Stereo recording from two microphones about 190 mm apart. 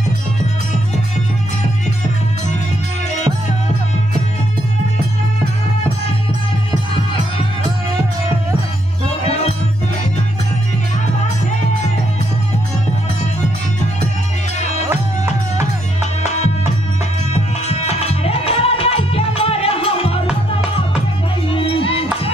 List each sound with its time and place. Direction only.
9.2 s music: 35° left (ahead or behind)
17.3 s music: 35° left (ahead or behind)
21.5 s music: 30° left (ahead or behind)